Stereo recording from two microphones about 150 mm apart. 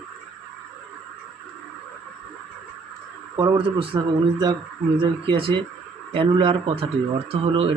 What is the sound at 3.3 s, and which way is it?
Speech, 30° right (ahead or behind).